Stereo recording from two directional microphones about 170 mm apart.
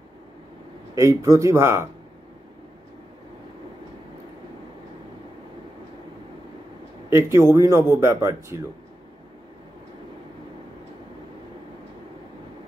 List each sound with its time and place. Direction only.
0.9 s a man's voice: 20° right (ahead or behind)
7.1 s a man's voice: 15° right (ahead or behind)